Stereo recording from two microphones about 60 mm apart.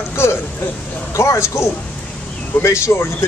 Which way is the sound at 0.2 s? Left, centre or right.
Left.